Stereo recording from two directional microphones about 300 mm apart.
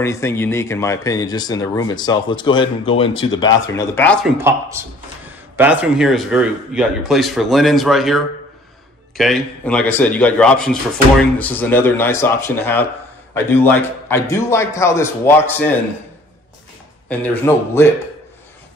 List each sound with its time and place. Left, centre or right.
0.0 s speech: centre
3.4 s speech: left
3.7 s speech: centre
4.4 s speech: centre
17.1 s speech: centre